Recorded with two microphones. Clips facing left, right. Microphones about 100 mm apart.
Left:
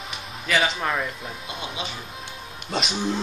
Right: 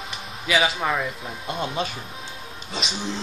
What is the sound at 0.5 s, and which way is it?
Speech, 5° right (ahead or behind).